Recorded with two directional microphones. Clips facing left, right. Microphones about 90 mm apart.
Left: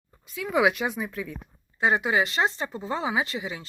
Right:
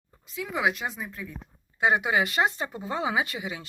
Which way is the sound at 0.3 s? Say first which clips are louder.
Left 4 dB; 60° left (ahead or behind).